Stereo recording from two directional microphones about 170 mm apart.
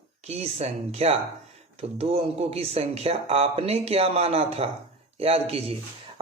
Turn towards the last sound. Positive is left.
turn(degrees=-35)  # may be behind; listen again after turning